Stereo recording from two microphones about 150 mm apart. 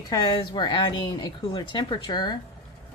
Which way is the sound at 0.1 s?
25° left (ahead or behind).